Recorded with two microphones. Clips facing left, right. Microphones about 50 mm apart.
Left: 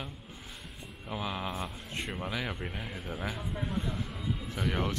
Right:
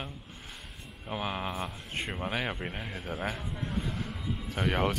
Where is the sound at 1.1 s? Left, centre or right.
Right.